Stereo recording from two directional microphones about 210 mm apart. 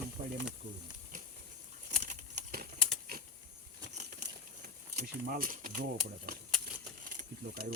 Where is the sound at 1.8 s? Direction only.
35° right (ahead or behind).